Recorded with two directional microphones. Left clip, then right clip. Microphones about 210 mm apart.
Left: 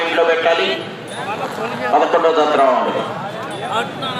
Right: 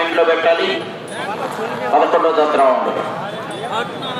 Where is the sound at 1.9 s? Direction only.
25° left (ahead or behind).